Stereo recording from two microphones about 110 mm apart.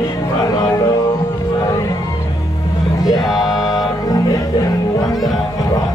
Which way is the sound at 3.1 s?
Centre (ahead or behind).